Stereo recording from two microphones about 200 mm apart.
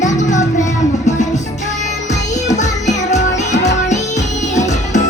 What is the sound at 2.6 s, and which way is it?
Music, 35° left (ahead or behind).